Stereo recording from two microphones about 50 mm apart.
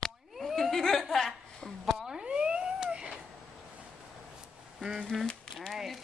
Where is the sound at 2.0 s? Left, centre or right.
Centre.